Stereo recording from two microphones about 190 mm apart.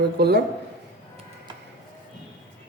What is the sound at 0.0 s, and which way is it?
Speech, 60° right (ahead or behind).